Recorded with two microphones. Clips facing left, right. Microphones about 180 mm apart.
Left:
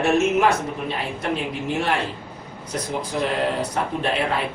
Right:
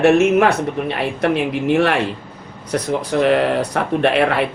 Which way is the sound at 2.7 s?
70° right (ahead or behind).